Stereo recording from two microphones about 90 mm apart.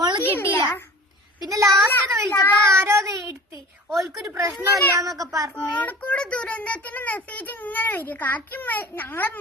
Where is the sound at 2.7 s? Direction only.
30° right (ahead or behind).